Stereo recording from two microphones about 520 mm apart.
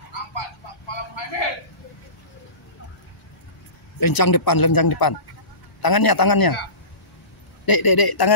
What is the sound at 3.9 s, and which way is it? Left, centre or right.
Speech, left.